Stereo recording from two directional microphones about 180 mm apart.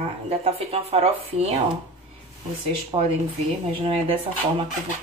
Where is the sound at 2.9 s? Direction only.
25° right (ahead or behind).